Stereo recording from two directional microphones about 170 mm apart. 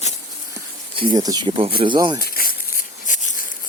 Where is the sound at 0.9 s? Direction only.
25° right (ahead or behind).